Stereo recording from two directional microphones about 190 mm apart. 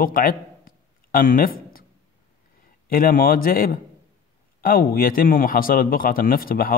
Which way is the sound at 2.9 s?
50° left (ahead or behind).